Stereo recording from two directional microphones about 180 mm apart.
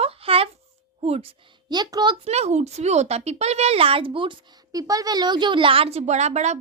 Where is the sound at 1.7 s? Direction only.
25° right (ahead or behind).